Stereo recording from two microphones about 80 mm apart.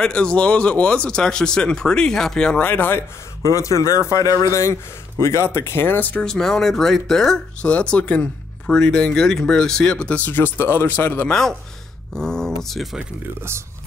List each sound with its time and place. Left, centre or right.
0.0 s speech: centre
2.6 s speech: left
5.2 s speech: left
6.2 s speech: centre
12.1 s speech: centre